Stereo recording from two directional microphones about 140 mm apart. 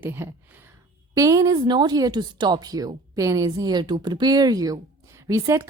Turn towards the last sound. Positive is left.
turn(degrees=-20)  # may be behind; listen again after turning